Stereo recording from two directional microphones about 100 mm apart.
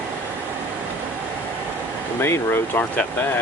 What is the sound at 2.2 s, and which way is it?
Speech, 25° left (ahead or behind).